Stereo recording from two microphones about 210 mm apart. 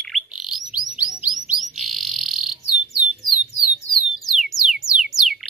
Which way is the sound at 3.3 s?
20° right (ahead or behind).